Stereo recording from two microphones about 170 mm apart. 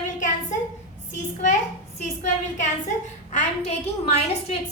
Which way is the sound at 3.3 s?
40° left (ahead or behind).